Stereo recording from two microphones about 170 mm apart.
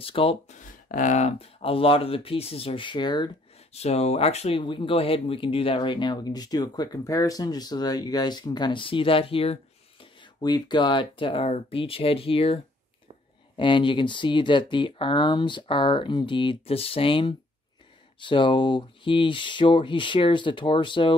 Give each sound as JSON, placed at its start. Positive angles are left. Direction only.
{"t": 0.0, "sound": "speech", "side_deg": 35}
{"t": 0.7, "sound": "speech", "side_deg": 50}
{"t": 3.7, "sound": "speech", "side_deg": 40}
{"t": 13.6, "sound": "speech", "side_deg": 30}